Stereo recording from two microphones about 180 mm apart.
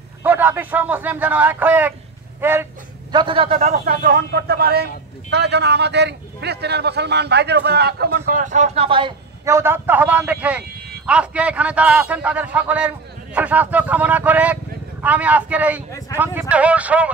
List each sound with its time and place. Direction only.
0.2 s a man's voice: 10° right (ahead or behind)
3.1 s a man's voice: 25° right (ahead or behind)
3.8 s a man's voice: 50° right (ahead or behind); by 9.1 s 30° right (ahead or behind)
9.4 s a man's voice: 15° right (ahead or behind)